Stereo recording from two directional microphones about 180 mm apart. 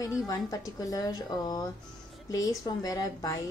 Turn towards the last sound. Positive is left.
turn(degrees=20)  # may be behind; listen again after turning